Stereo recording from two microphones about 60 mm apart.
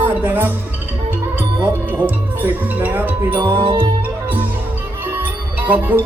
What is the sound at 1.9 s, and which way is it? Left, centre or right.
Speech, right.